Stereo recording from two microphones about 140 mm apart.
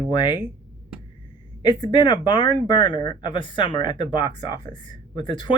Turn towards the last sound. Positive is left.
turn(degrees=30)  # may be behind; listen again after turning